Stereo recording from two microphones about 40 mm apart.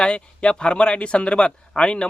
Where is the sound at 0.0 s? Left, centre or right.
Left.